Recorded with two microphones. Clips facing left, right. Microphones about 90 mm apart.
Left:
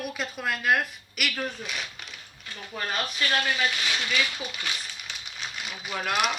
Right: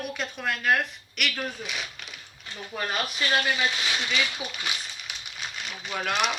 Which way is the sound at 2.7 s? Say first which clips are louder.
Right 1 dB; 10° right (ahead or behind).